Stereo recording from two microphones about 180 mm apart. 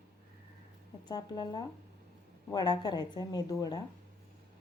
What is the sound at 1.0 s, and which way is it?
Speech, 25° left (ahead or behind).